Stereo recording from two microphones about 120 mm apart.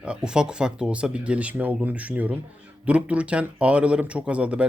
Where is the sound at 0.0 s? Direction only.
5° right (ahead or behind).